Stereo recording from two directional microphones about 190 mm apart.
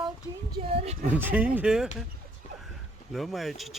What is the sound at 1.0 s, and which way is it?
Speech, 10° right (ahead or behind).